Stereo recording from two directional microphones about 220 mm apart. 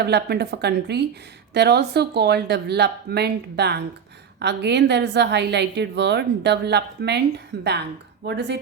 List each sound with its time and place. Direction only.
0.0 s a woman's voice: 50° right (ahead or behind)